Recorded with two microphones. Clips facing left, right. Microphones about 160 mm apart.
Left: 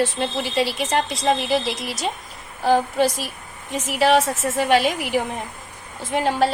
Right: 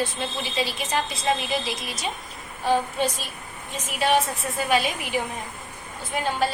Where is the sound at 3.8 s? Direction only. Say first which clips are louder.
Left 5 dB; 80° left.